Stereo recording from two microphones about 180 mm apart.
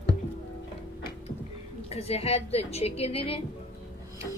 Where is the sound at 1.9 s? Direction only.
35° left (ahead or behind).